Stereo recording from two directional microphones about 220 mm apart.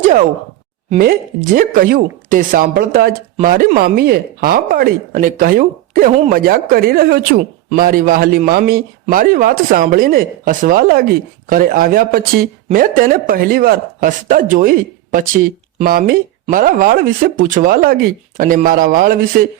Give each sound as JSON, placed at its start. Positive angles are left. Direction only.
{"t": 0.9, "sound": "speech", "side_deg": -40}